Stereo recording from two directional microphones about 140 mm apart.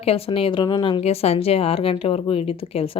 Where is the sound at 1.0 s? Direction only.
50° left (ahead or behind).